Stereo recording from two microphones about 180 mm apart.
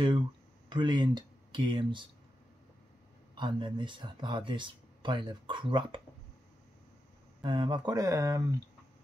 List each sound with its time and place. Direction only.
0.7 s speech: 25° right (ahead or behind)
3.3 s speech: 25° right (ahead or behind)
7.4 s speech: 25° right (ahead or behind)